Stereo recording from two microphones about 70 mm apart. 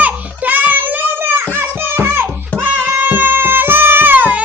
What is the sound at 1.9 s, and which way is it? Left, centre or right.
Music, right.